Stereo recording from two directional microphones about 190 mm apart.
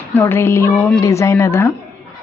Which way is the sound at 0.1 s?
10° left (ahead or behind).